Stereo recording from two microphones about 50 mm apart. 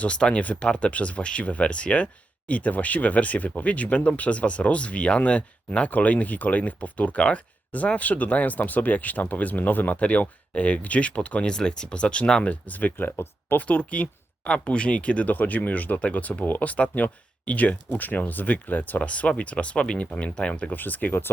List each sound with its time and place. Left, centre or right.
0.0 s speech: left
11.4 s speech: centre; by 13.6 s left
13.6 s speech: left
18.9 s speech: left